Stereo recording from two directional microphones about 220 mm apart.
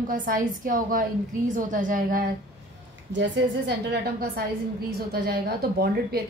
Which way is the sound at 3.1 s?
55° right (ahead or behind).